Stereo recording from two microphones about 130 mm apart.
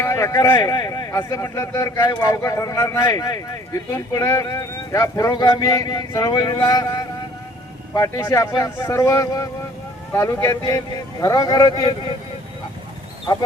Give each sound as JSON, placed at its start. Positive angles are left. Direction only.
{"t": 0.0, "sound": "speech", "side_deg": 25}